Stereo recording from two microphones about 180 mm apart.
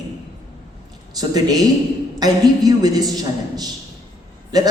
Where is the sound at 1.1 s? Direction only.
20° right (ahead or behind).